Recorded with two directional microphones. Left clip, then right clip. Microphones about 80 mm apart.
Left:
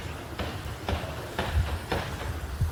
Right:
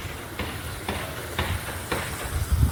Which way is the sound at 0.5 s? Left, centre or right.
Centre.